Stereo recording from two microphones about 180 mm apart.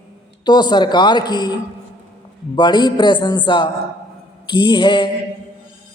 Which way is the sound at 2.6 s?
25° left (ahead or behind).